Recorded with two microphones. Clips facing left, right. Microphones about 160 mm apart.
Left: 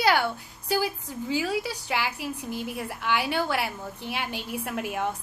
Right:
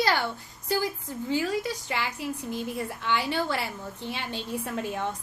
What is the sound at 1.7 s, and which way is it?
Speech, 80° left.